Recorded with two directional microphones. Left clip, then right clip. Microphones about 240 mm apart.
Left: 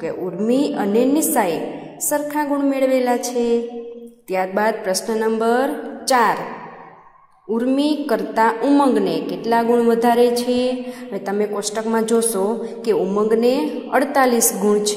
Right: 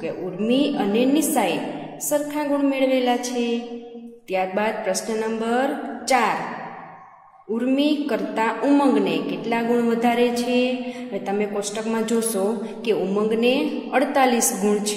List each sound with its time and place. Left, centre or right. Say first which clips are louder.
0.5 s a man's voice: left 2 dB; left
7.5 s a man's voice: left 2 dB; left